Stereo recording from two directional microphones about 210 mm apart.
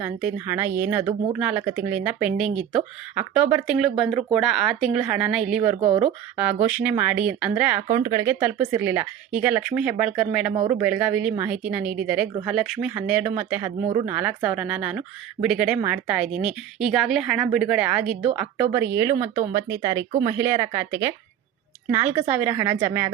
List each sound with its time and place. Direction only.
0.0 s speech: 10° right (ahead or behind)
5.8 s speech: 20° right (ahead or behind)
6.3 s speech: 5° right (ahead or behind)